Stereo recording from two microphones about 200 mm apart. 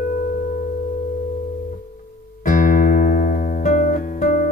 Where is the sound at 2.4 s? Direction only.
40° left (ahead or behind).